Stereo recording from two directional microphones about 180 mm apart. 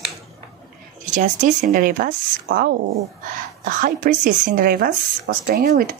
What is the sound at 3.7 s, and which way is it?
Speech, 45° right (ahead or behind).